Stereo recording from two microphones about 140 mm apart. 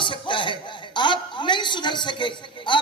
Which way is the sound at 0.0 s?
35° left (ahead or behind).